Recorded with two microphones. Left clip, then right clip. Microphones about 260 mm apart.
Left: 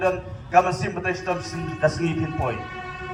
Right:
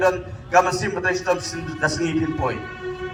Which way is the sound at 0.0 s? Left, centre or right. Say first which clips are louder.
Right 4 dB; right.